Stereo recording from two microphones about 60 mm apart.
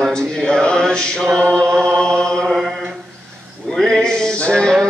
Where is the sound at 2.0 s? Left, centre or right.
Centre.